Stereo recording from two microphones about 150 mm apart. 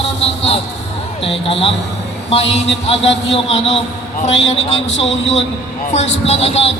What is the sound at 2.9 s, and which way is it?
Speech, 40° left (ahead or behind).